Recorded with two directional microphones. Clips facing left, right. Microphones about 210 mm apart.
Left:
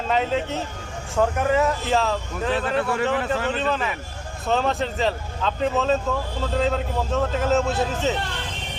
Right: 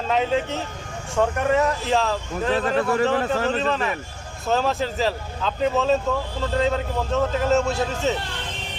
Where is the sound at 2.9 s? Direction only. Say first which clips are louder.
Right 2 dB; 35° right (ahead or behind).